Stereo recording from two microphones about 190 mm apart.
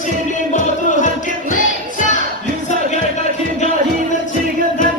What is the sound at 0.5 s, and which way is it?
Music, 40° left (ahead or behind).